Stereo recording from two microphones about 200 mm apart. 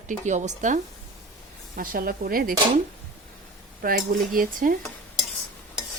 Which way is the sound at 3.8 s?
45° right (ahead or behind).